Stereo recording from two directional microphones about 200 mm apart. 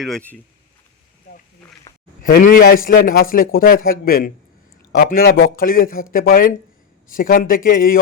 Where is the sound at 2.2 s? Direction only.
45° left (ahead or behind).